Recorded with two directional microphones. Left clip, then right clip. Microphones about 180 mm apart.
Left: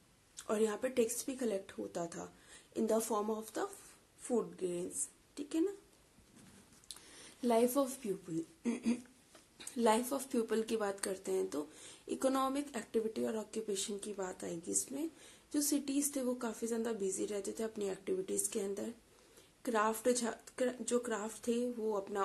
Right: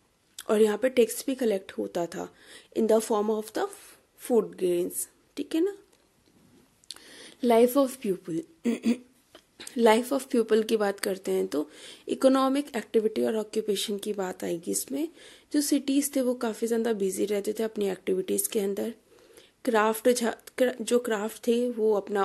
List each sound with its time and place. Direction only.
0.4 s a woman's voice: 40° right (ahead or behind)
6.9 s a sound: 40° right (ahead or behind)
7.4 s a woman's voice: 40° right (ahead or behind)